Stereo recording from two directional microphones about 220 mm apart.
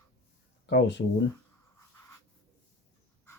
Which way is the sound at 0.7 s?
50° left (ahead or behind).